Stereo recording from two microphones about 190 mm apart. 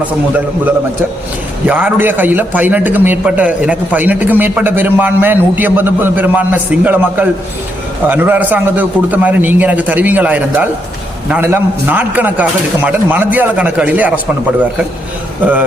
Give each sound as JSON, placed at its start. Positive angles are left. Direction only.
{"t": 0.0, "sound": "a man's voice", "side_deg": -10}